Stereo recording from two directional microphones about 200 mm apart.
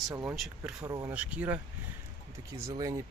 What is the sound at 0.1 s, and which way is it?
Speech, 20° right (ahead or behind).